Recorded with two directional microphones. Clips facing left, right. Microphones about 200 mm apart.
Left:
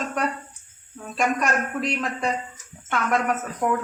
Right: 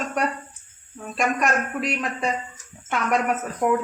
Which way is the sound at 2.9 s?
15° right (ahead or behind).